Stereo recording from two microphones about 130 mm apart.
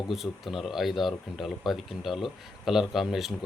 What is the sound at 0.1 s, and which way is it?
Speech, centre (ahead or behind).